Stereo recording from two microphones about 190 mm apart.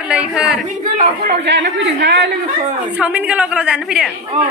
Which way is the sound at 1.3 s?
65° right (ahead or behind).